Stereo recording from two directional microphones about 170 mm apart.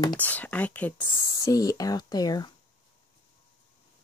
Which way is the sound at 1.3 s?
20° left (ahead or behind).